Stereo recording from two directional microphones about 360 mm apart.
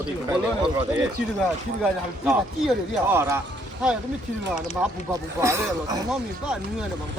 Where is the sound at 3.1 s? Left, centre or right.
Centre.